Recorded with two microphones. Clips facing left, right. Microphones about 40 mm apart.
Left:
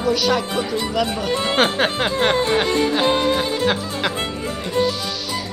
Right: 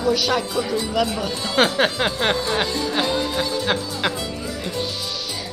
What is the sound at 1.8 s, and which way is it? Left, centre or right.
Speech, centre.